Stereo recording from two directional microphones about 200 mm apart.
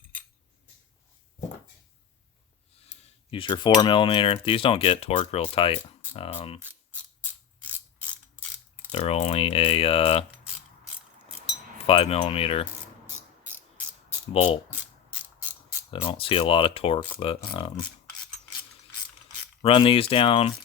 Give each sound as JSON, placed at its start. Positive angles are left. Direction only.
{"t": 2.8, "sound": "speech", "side_deg": 25}
{"t": 8.9, "sound": "speech", "side_deg": 30}
{"t": 11.9, "sound": "speech", "side_deg": 30}
{"t": 13.1, "sound": "cricket", "side_deg": -10}
{"t": 14.3, "sound": "speech", "side_deg": 25}
{"t": 15.9, "sound": "speech", "side_deg": 25}
{"t": 19.6, "sound": "speech", "side_deg": 25}